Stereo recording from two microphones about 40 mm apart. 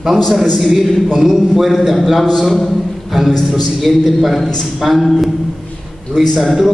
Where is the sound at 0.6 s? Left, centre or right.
Centre.